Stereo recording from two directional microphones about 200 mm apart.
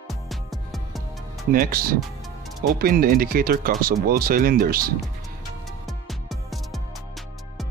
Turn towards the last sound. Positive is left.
turn(degrees=0)  # may be behind; listen again after turning